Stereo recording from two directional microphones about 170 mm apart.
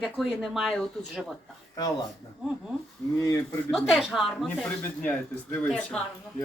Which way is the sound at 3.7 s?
Centre (ahead or behind).